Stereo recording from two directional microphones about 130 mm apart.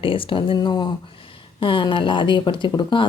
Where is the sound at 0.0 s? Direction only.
45° left (ahead or behind).